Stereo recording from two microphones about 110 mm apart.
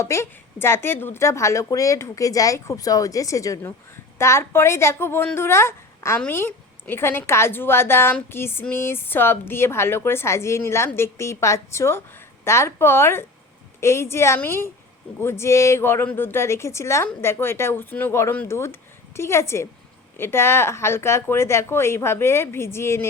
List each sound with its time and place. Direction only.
0.0 s a woman's voice: 25° left (ahead or behind)